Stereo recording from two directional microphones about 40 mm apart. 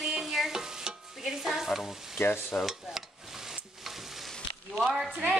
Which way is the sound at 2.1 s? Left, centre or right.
Left.